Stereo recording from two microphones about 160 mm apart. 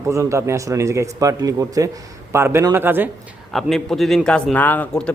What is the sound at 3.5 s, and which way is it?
A man's voice, centre (ahead or behind).